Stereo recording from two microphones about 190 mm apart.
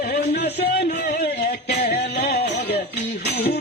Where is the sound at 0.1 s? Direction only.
55° left (ahead or behind).